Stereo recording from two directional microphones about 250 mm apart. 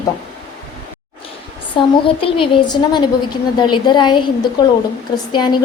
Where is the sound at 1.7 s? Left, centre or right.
Left.